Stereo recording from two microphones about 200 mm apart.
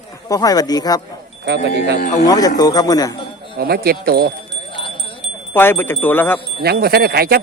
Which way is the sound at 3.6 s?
50° right (ahead or behind).